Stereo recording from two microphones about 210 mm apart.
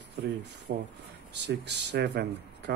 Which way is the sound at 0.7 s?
50° right (ahead or behind).